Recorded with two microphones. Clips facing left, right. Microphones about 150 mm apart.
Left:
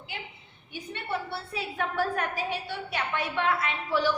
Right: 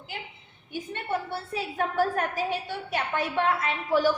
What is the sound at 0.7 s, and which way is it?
A woman's voice, 45° right (ahead or behind).